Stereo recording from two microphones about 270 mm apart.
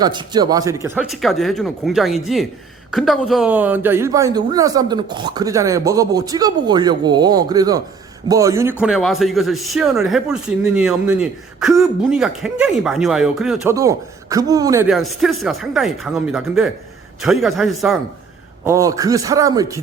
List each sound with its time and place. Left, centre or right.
0.0 s a man's voice: centre
14.8 s a man's voice: centre
18.6 s speech: centre